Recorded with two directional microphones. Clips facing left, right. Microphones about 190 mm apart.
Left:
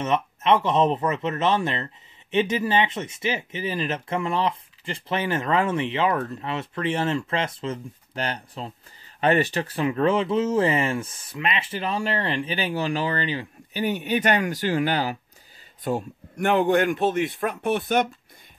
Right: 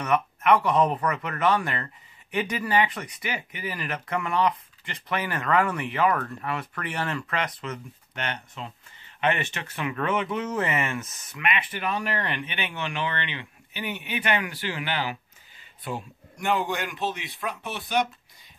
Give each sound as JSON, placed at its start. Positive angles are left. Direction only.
{"t": 0.0, "sound": "speech", "side_deg": 25}